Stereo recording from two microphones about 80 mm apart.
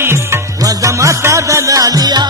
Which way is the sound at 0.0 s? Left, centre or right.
Right.